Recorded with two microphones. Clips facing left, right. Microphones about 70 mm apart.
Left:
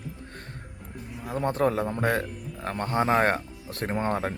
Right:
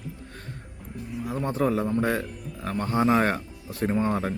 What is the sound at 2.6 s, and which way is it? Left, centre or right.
Speech, left.